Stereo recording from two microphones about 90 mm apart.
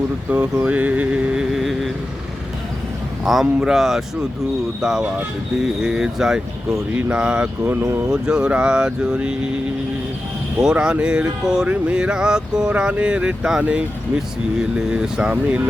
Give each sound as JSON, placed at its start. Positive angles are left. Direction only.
{"t": 0.3, "sound": "speech", "side_deg": -15}
{"t": 0.6, "sound": "music", "side_deg": -15}
{"t": 3.2, "sound": "speech", "side_deg": -5}
{"t": 7.8, "sound": "speech", "side_deg": -35}
{"t": 8.1, "sound": "speech", "side_deg": -10}
{"t": 10.6, "sound": "speech", "side_deg": -10}